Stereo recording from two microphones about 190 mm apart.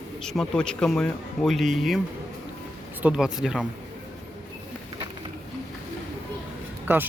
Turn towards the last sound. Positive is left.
turn(degrees=-10)  # may be behind; listen again after turning